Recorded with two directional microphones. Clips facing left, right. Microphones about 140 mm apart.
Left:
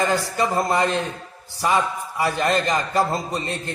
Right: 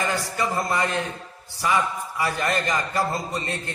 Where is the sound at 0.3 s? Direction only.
25° left (ahead or behind).